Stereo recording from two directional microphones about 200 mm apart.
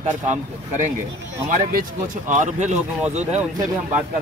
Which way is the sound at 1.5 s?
40° right (ahead or behind).